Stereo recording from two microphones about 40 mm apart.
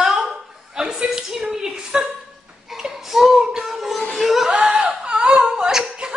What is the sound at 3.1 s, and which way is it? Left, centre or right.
Child singing, centre.